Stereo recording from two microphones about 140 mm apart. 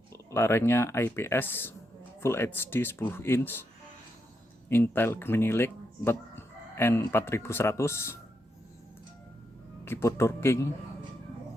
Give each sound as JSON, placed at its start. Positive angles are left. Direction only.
{"t": 0.1, "sound": "speech", "side_deg": 20}
{"t": 4.7, "sound": "speech", "side_deg": 15}
{"t": 9.8, "sound": "speech", "side_deg": 20}